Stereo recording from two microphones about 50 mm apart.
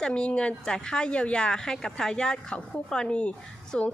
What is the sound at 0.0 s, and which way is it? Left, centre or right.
A woman's voice, centre.